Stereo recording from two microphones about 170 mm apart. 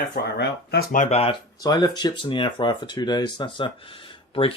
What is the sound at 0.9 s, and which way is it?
Speech, 35° left (ahead or behind).